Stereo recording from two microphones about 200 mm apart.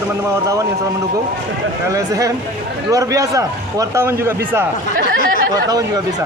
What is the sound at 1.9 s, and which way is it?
A man's voice, 15° right (ahead or behind).